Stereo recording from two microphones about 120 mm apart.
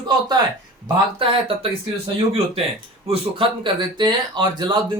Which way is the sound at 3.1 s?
45° right (ahead or behind).